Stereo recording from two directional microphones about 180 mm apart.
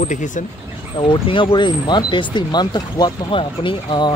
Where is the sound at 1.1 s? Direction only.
25° left (ahead or behind).